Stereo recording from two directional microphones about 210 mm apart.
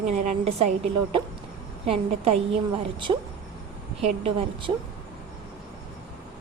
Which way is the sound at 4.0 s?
25° right (ahead or behind).